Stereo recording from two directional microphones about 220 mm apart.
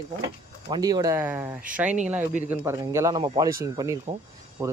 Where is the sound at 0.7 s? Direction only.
20° right (ahead or behind).